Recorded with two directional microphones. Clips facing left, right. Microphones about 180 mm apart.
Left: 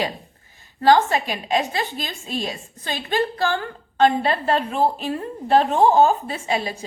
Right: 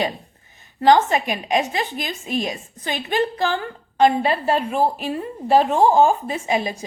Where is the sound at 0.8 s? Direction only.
20° right (ahead or behind).